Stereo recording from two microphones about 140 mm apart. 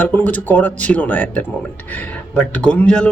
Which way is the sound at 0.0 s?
10° left (ahead or behind).